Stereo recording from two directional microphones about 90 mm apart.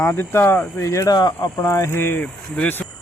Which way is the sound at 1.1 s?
50° left (ahead or behind).